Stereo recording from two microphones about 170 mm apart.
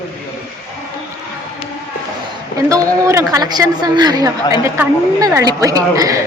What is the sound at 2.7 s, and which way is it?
A woman's voice, 20° right (ahead or behind).